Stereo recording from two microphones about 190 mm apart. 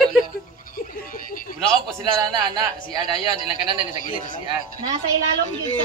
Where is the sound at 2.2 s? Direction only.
25° right (ahead or behind).